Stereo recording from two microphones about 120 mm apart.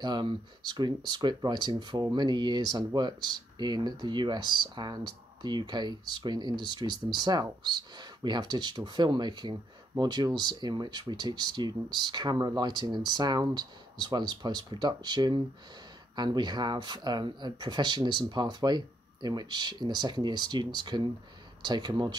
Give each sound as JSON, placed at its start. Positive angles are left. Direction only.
{"t": 0.0, "sound": "speech", "side_deg": -40}